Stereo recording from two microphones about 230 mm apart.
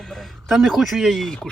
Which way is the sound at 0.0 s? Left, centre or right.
Centre.